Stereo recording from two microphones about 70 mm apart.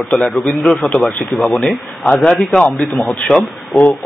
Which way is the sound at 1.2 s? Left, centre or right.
Centre.